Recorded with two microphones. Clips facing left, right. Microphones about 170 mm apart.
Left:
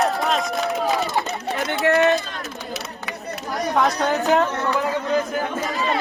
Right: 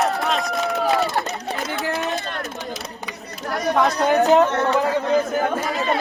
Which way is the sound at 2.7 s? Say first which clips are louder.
Left 1 dB; 70° left (ahead or behind).